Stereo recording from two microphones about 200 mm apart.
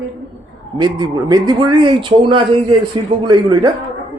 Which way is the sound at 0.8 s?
20° right (ahead or behind).